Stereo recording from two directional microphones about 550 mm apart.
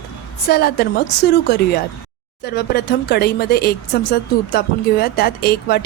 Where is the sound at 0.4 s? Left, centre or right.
Centre.